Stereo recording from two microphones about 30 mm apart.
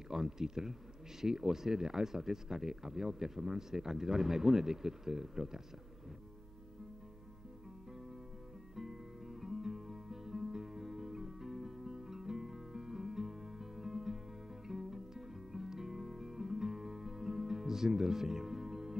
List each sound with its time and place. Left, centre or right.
0.1 s speech: centre
8.7 s music: centre